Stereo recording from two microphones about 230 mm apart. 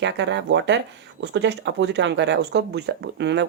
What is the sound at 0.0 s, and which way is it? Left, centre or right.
Speech, right.